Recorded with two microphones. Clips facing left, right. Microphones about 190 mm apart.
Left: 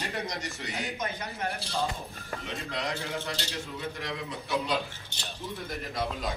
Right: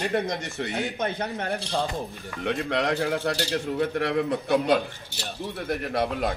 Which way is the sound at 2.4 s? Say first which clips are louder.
Right 11 dB; 60° right (ahead or behind).